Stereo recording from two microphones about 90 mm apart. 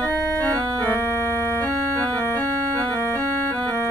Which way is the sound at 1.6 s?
15° left (ahead or behind).